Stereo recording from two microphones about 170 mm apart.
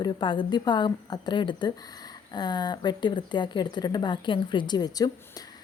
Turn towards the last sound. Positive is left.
turn(degrees=25)  # may be behind; listen again after turning